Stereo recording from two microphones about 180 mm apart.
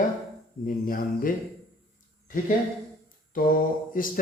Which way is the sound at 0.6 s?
50° left (ahead or behind).